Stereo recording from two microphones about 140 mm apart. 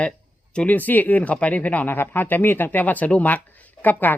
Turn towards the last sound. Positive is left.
turn(degrees=10)  # may be behind; listen again after turning